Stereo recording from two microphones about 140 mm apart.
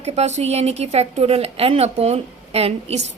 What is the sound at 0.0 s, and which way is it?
A woman's voice, 50° right (ahead or behind).